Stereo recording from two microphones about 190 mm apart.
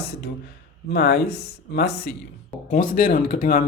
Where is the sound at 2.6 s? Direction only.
45° left (ahead or behind).